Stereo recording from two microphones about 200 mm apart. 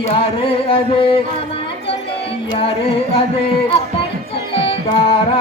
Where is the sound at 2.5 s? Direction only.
25° left (ahead or behind).